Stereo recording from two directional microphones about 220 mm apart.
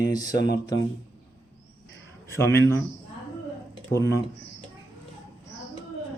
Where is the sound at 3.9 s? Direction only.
15° left (ahead or behind).